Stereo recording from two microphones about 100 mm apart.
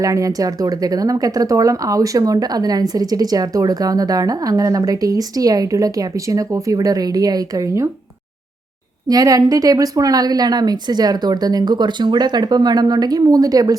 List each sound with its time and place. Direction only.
0.0 s speech: 35° right (ahead or behind)
9.0 s speech: 40° right (ahead or behind)